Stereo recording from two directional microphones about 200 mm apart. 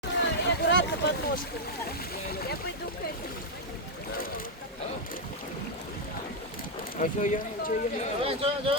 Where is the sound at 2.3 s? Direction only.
50° left (ahead or behind).